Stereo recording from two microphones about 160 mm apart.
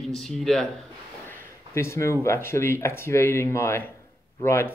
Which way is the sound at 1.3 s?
15° left (ahead or behind).